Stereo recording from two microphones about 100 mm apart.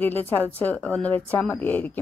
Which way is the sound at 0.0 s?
15° left (ahead or behind).